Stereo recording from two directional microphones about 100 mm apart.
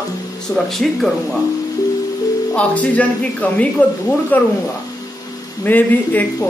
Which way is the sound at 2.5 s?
15° left (ahead or behind).